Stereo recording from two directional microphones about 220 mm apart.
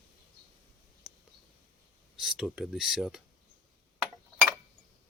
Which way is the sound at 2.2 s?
Centre (ahead or behind).